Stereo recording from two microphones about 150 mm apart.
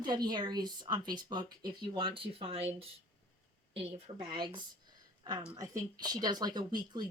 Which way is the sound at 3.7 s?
40° right (ahead or behind).